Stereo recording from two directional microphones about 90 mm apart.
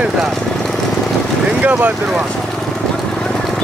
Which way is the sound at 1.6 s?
20° right (ahead or behind).